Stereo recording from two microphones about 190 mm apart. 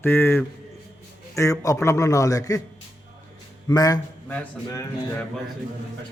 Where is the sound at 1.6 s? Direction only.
15° left (ahead or behind).